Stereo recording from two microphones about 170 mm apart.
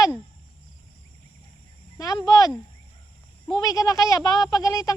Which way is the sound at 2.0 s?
25° left (ahead or behind).